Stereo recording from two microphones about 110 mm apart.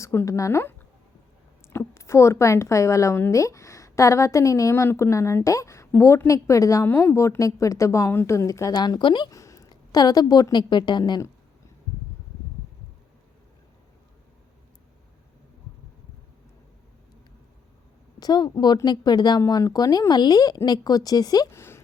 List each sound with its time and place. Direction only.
0.0 s a woman's voice: 25° left (ahead or behind)
1.7 s a woman's voice: 25° left (ahead or behind); by 9.3 s 45° left (ahead or behind)
9.3 s a woman's voice: 30° left (ahead or behind)
18.2 s speech: 40° left (ahead or behind)
21.5 s a woman's voice: 20° left (ahead or behind)